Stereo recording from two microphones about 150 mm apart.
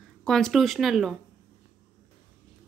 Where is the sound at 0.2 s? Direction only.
5° left (ahead or behind).